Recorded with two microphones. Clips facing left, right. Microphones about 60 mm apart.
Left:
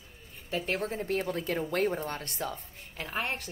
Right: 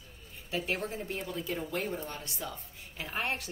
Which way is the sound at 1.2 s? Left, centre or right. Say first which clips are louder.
Left 4 dB; left.